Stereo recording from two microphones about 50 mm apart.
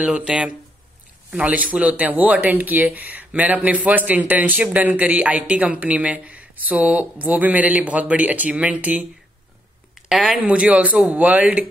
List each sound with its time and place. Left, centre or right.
0.0 s speech: right
9.9 s speech: centre
10.4 s speech: right